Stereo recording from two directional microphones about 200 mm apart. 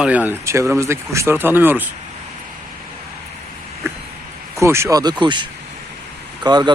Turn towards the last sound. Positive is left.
turn(degrees=-20)  # may be behind; listen again after turning